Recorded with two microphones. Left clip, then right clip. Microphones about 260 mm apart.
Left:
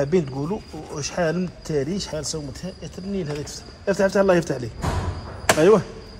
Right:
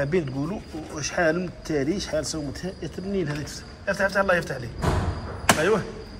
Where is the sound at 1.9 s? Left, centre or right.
Left.